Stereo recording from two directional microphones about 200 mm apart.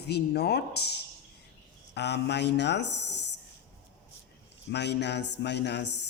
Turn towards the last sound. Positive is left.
turn(degrees=60)  # may be behind; listen again after turning